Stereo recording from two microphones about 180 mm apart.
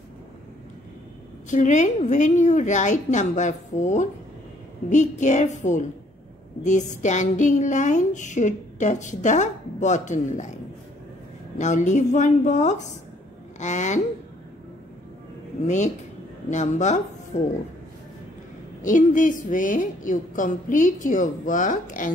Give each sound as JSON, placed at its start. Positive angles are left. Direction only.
{"t": 1.5, "sound": "a woman's voice", "side_deg": 45}
{"t": 15.6, "sound": "a woman's voice", "side_deg": 40}
{"t": 18.9, "sound": "a woman's voice", "side_deg": 45}